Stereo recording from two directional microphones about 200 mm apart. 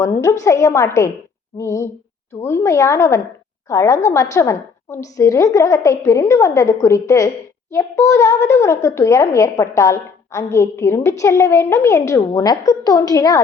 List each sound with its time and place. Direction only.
0.0 s a child's voice: 15° left (ahead or behind)